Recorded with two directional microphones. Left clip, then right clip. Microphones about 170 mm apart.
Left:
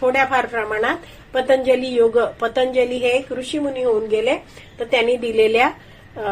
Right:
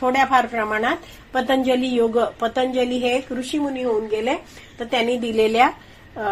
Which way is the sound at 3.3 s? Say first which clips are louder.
Left 2 dB; 35° right (ahead or behind).